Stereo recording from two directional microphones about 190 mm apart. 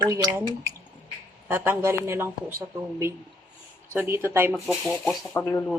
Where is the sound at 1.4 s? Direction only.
10° right (ahead or behind).